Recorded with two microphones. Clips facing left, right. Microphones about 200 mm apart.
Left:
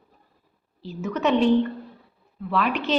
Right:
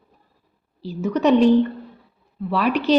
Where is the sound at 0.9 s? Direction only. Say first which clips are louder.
Right 5 dB; 35° right (ahead or behind).